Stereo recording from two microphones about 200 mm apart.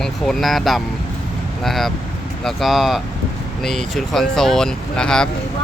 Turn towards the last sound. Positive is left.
turn(degrees=5)  # may be behind; listen again after turning